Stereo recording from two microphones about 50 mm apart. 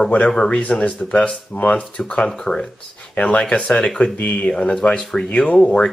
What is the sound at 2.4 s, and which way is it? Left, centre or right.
Speech, centre.